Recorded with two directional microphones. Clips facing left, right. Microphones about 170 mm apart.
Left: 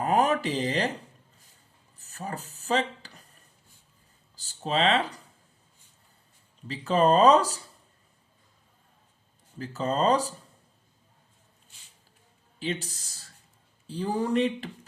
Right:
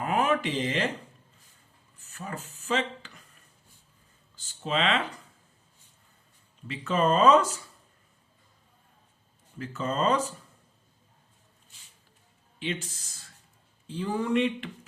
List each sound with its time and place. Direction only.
0.0 s speech: 40° left (ahead or behind)
2.0 s speech: 40° left (ahead or behind)
4.4 s speech: 40° left (ahead or behind)
6.7 s speech: 35° left (ahead or behind)
9.6 s speech: 35° left (ahead or behind)
12.5 s speech: 40° left (ahead or behind)